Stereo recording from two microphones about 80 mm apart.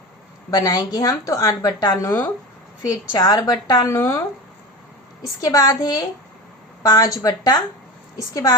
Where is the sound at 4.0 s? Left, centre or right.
Left.